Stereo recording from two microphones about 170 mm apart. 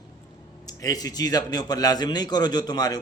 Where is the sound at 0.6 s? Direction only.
20° left (ahead or behind).